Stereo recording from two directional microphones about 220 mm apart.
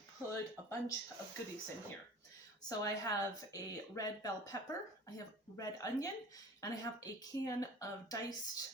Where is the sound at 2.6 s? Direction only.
15° left (ahead or behind).